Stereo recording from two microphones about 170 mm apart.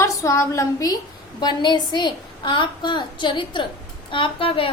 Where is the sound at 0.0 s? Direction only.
20° left (ahead or behind).